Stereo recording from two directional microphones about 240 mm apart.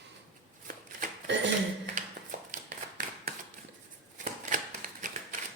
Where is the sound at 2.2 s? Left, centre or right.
Right.